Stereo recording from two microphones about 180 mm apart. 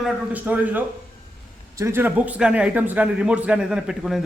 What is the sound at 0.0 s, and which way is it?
A man's voice, 10° right (ahead or behind).